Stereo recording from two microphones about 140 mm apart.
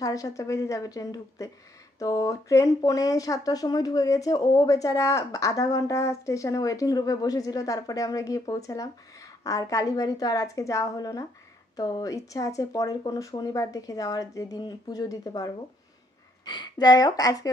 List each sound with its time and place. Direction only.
0.0 s speech: 25° left (ahead or behind)